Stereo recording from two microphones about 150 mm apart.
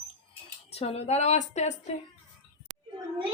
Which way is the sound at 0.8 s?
45° left (ahead or behind).